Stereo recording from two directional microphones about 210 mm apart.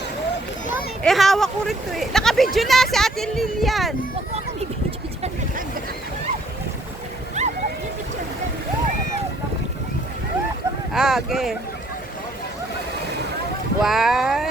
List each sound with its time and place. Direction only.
1.0 s speech: centre (ahead or behind)
7.4 s a sound: 35° right (ahead or behind)
10.9 s speech: centre (ahead or behind)
13.8 s speech: centre (ahead or behind)